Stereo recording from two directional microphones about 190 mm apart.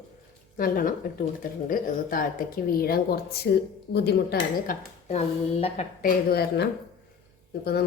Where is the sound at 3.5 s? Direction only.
60° left (ahead or behind).